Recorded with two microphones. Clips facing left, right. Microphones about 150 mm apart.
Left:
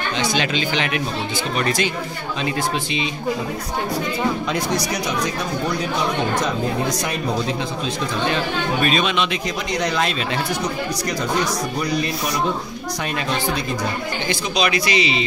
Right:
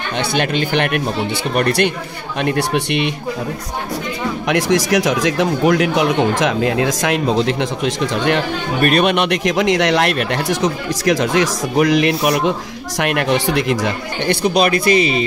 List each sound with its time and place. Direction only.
0.2 s speech: 55° right (ahead or behind)
4.5 s speech: 90° right; by 15.2 s 50° right (ahead or behind)